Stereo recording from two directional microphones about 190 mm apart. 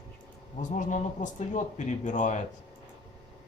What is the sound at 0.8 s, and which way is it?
Speech, 40° left (ahead or behind).